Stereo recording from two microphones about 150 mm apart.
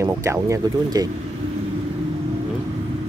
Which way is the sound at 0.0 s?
20° right (ahead or behind).